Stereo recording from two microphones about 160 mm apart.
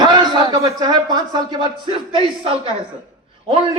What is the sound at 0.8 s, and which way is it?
A man's voice, 25° right (ahead or behind).